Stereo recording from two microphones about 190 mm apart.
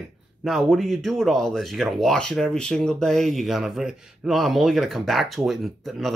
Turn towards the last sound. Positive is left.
turn(degrees=0)  # may be behind; listen again after turning